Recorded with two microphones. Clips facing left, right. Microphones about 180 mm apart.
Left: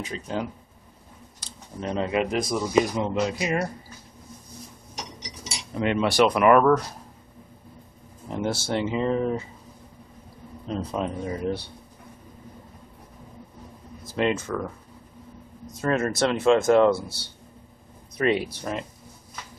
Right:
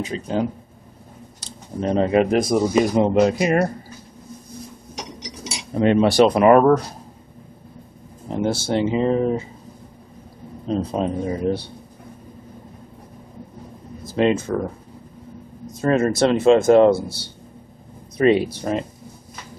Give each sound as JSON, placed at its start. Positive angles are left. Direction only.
{"t": 0.0, "sound": "speech", "side_deg": -25}
{"t": 1.4, "sound": "a sound", "side_deg": -40}
{"t": 2.3, "sound": "speech", "side_deg": -50}
{"t": 5.7, "sound": "speech", "side_deg": -35}
{"t": 8.3, "sound": "speech", "side_deg": -25}
{"t": 10.7, "sound": "speech", "side_deg": -30}
{"t": 14.1, "sound": "speech", "side_deg": -25}
{"t": 15.8, "sound": "speech", "side_deg": -25}